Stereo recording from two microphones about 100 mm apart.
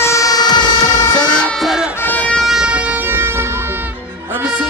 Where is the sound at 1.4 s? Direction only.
5° left (ahead or behind).